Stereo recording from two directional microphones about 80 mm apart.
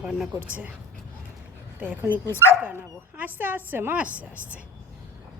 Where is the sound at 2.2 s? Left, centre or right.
Left.